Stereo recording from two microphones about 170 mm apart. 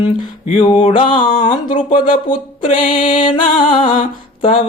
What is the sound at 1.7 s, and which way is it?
Mantra, 30° left (ahead or behind).